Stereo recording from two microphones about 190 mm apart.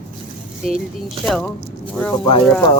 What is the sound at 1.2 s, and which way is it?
Speech, 5° left (ahead or behind).